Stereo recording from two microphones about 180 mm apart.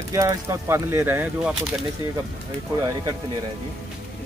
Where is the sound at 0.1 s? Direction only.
15° right (ahead or behind).